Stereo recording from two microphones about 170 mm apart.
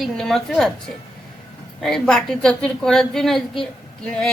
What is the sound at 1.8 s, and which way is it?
A woman's voice, centre (ahead or behind).